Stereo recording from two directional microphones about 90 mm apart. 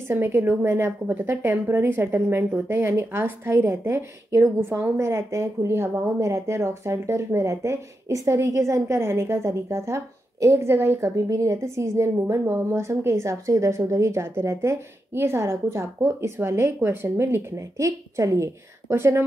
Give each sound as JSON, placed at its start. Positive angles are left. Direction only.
{"t": 0.1, "sound": "a woman's voice", "side_deg": -25}